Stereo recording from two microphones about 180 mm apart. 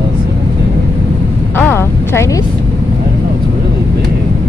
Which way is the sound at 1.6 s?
15° left (ahead or behind).